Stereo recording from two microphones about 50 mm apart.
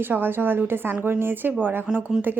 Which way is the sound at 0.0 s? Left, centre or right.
Right.